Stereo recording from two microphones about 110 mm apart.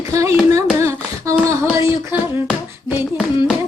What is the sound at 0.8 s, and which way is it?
Humming, 25° right (ahead or behind).